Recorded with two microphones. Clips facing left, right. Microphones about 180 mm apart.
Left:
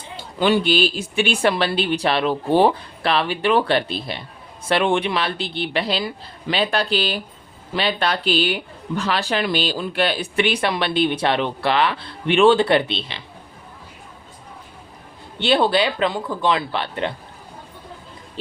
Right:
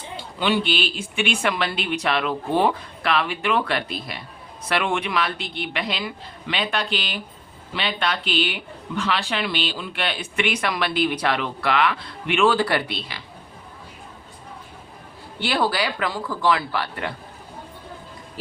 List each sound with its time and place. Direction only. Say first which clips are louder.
0.3 s speech: left 5 dB; 45° left (ahead or behind); by 13.2 s 25° left (ahead or behind)
15.4 s speech: left 5 dB; 25° left (ahead or behind)